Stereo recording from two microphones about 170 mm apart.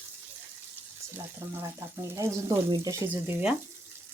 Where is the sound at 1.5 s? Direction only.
15° right (ahead or behind).